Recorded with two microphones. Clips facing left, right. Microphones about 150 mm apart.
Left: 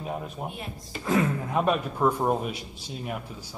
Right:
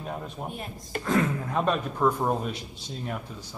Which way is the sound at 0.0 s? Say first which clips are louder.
Left 2 dB; 5° left (ahead or behind).